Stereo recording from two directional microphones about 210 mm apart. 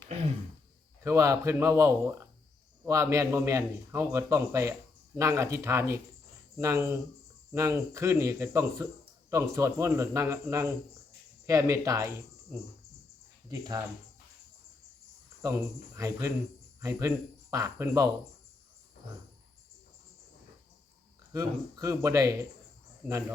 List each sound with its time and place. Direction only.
1.0 s a man's voice: 15° right (ahead or behind)
13.5 s a man's voice: 15° right (ahead or behind)
16.0 s a man's voice: 15° right (ahead or behind)
21.3 s a man's voice: 15° right (ahead or behind)